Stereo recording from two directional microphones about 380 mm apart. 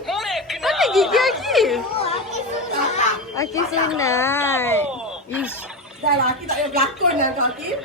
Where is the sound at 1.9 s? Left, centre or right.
Centre.